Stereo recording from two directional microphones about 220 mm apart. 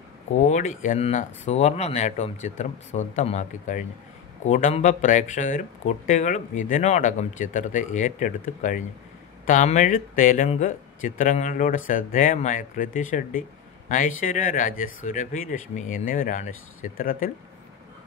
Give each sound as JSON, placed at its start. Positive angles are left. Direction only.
{"t": 0.4, "sound": "speech", "side_deg": 35}